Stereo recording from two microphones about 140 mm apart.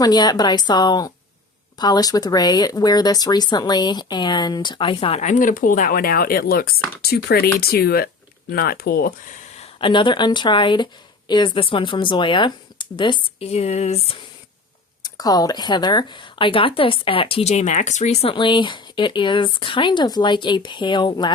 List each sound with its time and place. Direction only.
0.0 s a woman's voice: 30° left (ahead or behind); by 9.4 s 90° left
9.6 s speech: 40° left (ahead or behind)
15.0 s speech: 30° left (ahead or behind); by 18.3 s 50° left (ahead or behind)
18.3 s speech: 35° left (ahead or behind)